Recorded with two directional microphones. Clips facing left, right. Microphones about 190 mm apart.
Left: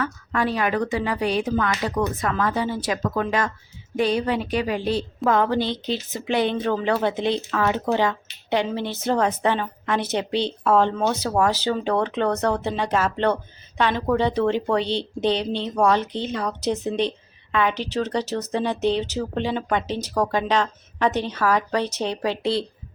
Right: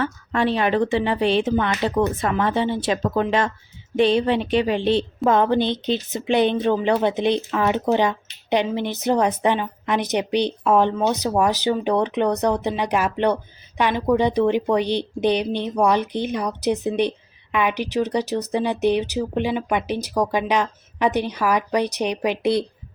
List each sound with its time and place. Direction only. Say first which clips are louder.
0.0 s a woman's voice: right 3 dB; 25° right (ahead or behind)